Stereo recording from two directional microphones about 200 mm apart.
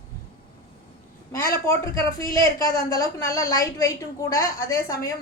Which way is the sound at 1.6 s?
15° left (ahead or behind).